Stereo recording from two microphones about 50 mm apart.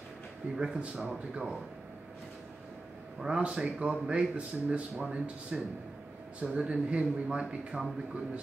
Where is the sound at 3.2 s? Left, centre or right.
Centre.